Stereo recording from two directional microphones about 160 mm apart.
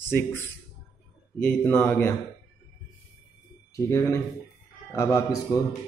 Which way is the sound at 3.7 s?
20° left (ahead or behind).